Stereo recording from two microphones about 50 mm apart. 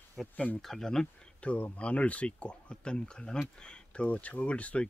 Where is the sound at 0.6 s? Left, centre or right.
Centre.